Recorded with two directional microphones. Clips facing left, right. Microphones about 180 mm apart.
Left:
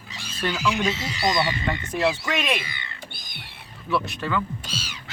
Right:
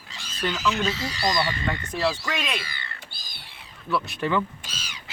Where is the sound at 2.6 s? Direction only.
20° left (ahead or behind).